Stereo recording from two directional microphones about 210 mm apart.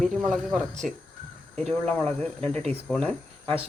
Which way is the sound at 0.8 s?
40° right (ahead or behind).